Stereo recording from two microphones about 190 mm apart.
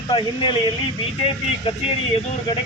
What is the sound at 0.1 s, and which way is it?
Speech, 25° left (ahead or behind).